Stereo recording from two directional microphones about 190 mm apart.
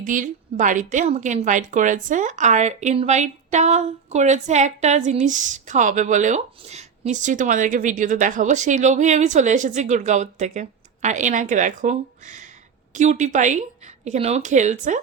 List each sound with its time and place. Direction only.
0.0 s a woman's voice: 45° right (ahead or behind)